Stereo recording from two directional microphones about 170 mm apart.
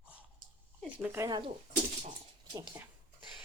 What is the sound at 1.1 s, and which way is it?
Speech, 20° right (ahead or behind).